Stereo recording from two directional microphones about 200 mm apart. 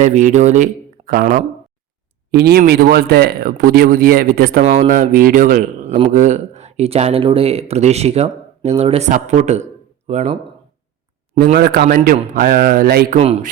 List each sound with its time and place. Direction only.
0.0 s speech: 35° right (ahead or behind)
2.3 s speech: 55° right (ahead or behind); by 10.3 s 35° right (ahead or behind)
11.4 s speech: 50° right (ahead or behind)
13.1 s speech: 30° right (ahead or behind)